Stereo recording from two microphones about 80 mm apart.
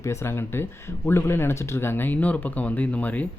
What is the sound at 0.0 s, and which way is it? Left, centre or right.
Speech, left.